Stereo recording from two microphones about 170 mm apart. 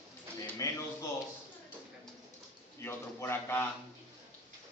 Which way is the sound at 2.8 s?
15° left (ahead or behind).